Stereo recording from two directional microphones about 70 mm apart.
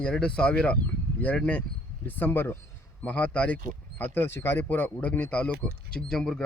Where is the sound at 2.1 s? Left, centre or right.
Left.